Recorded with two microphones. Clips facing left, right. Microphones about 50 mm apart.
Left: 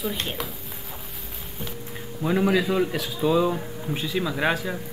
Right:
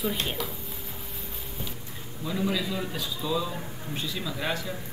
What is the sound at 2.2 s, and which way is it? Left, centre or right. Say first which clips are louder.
A man's voice: left 7 dB; left.